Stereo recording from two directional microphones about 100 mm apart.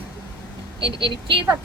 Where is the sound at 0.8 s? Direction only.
60° right (ahead or behind).